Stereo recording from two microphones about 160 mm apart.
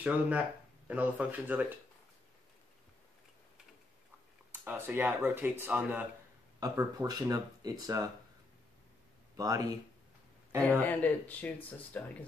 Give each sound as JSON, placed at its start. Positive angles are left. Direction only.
{"t": 0.0, "sound": "speech", "side_deg": -10}
{"t": 4.5, "sound": "speech", "side_deg": -10}
{"t": 6.6, "sound": "speech", "side_deg": -20}
{"t": 9.4, "sound": "speech", "side_deg": -20}
{"t": 10.8, "sound": "speech", "side_deg": 10}